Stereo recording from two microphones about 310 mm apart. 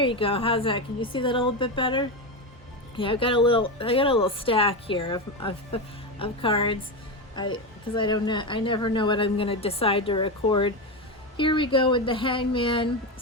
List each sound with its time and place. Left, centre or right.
0.0 s speech: centre